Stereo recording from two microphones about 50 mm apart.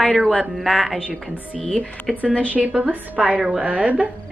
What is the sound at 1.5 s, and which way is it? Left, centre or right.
Speech, centre.